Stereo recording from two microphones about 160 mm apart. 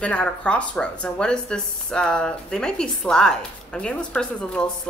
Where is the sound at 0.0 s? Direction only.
10° left (ahead or behind).